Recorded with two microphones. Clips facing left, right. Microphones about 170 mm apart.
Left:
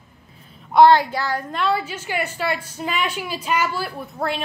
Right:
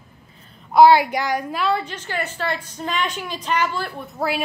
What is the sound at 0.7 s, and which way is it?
Speech, 5° right (ahead or behind).